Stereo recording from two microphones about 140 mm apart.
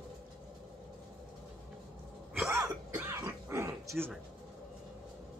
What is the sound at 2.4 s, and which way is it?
Throat clearing, 20° right (ahead or behind).